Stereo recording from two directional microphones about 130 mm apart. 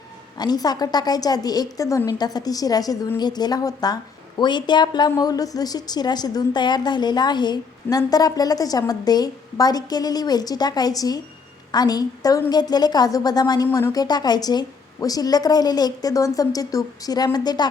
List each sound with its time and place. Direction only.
0.3 s a woman's voice: 30° left (ahead or behind)